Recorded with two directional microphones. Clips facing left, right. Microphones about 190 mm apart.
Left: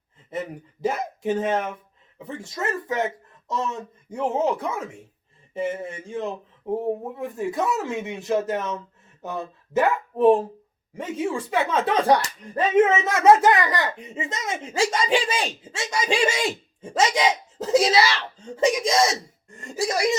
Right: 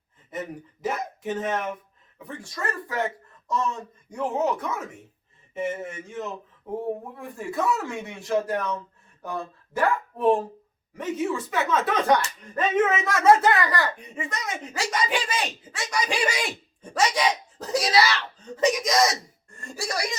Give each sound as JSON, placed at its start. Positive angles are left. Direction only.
{"t": 0.3, "sound": "speech", "side_deg": 30}